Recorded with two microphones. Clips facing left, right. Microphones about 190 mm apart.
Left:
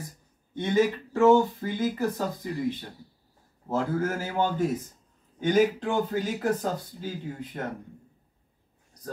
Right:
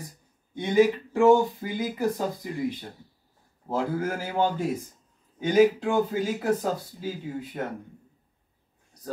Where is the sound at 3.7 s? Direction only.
10° right (ahead or behind).